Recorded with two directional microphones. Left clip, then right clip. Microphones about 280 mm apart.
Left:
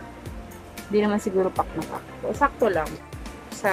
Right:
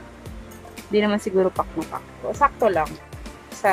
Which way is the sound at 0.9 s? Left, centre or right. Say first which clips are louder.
Right 2 dB; centre.